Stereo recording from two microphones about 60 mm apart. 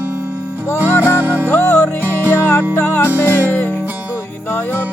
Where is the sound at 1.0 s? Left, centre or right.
Right.